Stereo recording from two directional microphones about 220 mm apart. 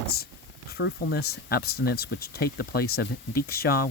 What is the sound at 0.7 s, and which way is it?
Speech, 50° left (ahead or behind).